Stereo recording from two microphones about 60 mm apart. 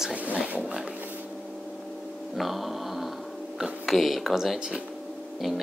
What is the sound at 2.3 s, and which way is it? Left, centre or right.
Music, centre.